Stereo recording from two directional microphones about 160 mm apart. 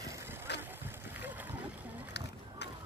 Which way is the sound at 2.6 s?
90° left.